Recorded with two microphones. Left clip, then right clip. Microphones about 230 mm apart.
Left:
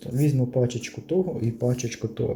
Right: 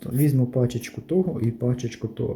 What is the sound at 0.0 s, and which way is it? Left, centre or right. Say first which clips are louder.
Speech: right 2 dB; centre.